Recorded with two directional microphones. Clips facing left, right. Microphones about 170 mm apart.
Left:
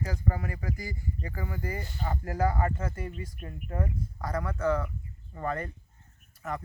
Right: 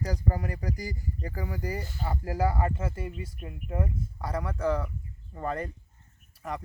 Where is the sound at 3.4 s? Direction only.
10° right (ahead or behind).